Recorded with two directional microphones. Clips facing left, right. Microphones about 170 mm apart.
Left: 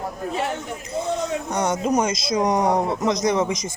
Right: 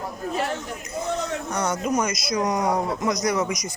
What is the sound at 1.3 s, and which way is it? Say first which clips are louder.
Speech: left 3 dB; 20° left (ahead or behind).